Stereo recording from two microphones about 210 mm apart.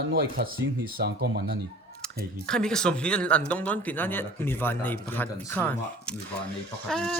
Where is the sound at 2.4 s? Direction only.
5° left (ahead or behind).